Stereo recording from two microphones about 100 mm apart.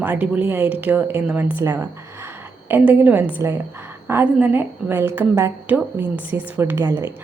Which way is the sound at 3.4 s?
30° right (ahead or behind).